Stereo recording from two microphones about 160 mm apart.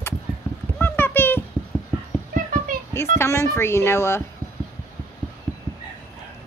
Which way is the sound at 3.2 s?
15° left (ahead or behind).